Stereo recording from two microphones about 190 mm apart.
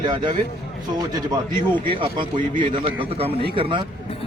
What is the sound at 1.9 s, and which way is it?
A man's voice, 25° right (ahead or behind).